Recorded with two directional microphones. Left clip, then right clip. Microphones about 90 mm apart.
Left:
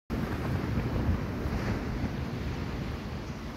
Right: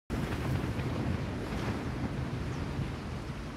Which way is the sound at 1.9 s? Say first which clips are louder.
Left 1 dB; 25° right (ahead or behind).